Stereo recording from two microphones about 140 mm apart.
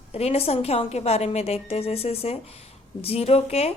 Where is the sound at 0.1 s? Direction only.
45° left (ahead or behind).